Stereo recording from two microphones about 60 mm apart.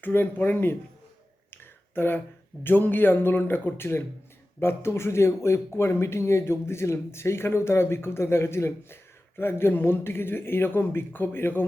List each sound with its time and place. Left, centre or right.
0.0 s a man's voice: left
2.0 s a man's voice: left